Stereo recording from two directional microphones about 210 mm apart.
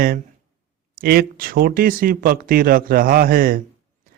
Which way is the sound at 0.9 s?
45° right (ahead or behind).